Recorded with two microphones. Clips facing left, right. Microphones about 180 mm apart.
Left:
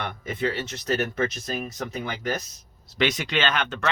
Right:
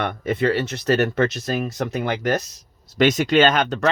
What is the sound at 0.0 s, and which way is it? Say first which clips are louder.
Speech: right 7 dB; 70° right (ahead or behind).